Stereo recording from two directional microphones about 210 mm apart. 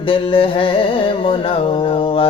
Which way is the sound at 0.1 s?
25° left (ahead or behind).